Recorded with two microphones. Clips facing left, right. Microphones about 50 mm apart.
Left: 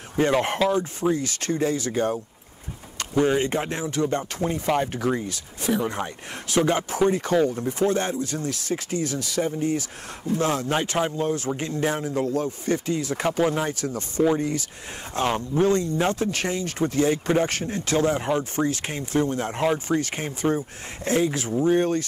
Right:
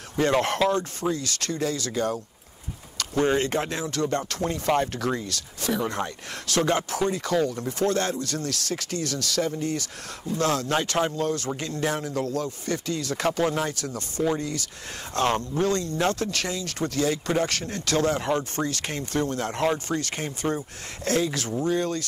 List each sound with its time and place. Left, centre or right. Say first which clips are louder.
0.3 s speech: even; centre
1.1 s speech: left 4 dB; left
3.2 s speech: left 2 dB; centre; by 7.3 s left
7.5 s speech: left 2 dB; centre
15.1 s speech: even; centre
15.6 s speech: left 4 dB; left